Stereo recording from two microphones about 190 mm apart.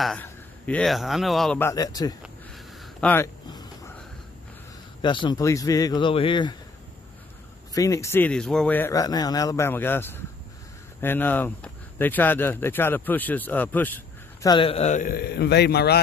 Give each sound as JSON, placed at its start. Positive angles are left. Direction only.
{"t": 0.0, "sound": "speech", "side_deg": 5}
{"t": 1.6, "sound": "speech", "side_deg": 15}
{"t": 2.2, "sound": "a sound", "side_deg": 5}
{"t": 5.0, "sound": "speech", "side_deg": 25}
{"t": 7.7, "sound": "speech", "side_deg": 15}
{"t": 14.5, "sound": "a man's voice", "side_deg": 30}